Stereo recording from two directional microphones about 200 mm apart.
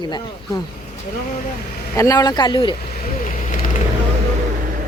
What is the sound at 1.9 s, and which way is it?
Speech, 15° left (ahead or behind).